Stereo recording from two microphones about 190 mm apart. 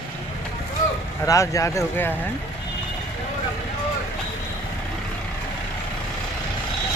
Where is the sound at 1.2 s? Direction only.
15° left (ahead or behind).